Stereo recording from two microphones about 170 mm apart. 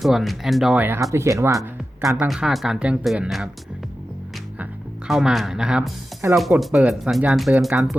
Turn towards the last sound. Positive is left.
turn(degrees=0)  # may be behind; listen again after turning